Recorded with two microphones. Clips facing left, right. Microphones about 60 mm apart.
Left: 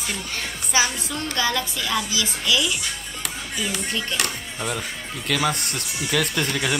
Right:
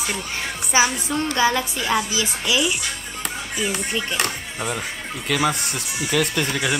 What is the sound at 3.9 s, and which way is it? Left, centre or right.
Speech, centre.